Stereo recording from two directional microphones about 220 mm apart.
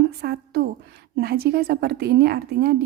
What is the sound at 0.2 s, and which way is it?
A woman's voice, 45° right (ahead or behind).